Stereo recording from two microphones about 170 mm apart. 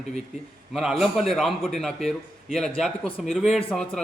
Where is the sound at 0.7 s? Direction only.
5° right (ahead or behind).